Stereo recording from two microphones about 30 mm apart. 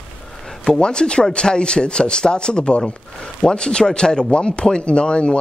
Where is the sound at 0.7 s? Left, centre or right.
Left.